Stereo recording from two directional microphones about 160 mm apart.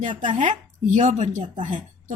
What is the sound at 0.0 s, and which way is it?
Speech, 50° right (ahead or behind).